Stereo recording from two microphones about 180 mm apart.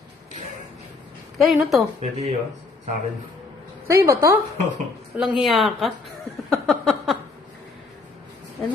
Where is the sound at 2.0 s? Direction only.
40° right (ahead or behind).